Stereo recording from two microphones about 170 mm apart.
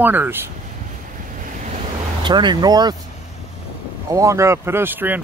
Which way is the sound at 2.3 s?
25° right (ahead or behind).